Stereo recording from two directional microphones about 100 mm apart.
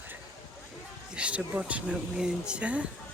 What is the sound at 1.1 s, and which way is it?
Speech, 10° right (ahead or behind).